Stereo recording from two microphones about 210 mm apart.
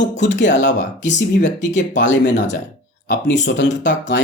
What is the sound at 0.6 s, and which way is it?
Speech, 35° left (ahead or behind).